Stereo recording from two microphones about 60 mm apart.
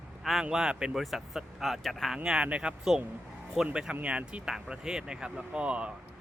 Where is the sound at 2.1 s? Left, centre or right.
Centre.